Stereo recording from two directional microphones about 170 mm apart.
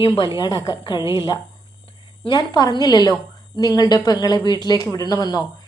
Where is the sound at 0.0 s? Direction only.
25° left (ahead or behind).